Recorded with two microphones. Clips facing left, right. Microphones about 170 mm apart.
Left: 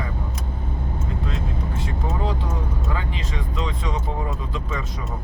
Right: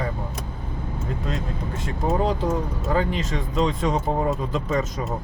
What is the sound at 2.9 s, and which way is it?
Speech, 45° right (ahead or behind).